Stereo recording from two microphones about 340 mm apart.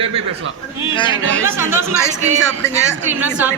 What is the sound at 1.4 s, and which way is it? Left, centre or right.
Speech, centre.